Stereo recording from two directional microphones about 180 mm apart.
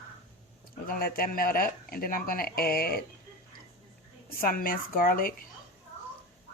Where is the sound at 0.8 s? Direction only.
55° left (ahead or behind).